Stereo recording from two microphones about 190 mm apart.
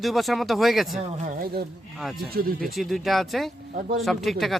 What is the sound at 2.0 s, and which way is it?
Speech, centre (ahead or behind).